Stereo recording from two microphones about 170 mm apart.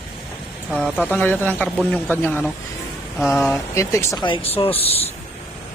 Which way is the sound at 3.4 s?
15° left (ahead or behind).